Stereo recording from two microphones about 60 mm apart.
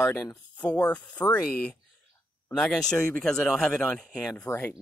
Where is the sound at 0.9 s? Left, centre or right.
Left.